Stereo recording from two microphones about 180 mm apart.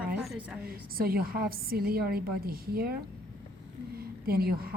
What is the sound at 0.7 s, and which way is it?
A woman's voice, 55° right (ahead or behind).